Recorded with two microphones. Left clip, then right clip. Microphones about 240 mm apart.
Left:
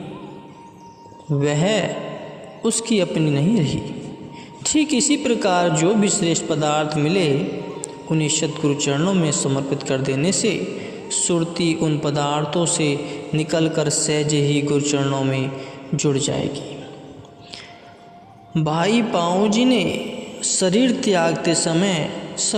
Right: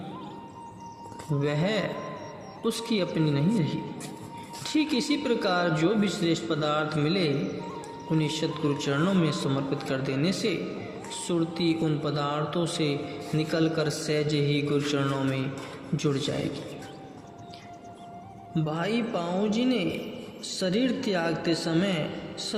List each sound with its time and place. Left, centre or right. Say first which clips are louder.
1.4 s speech: left 8 dB; left
18.5 s speech: left 10 dB; left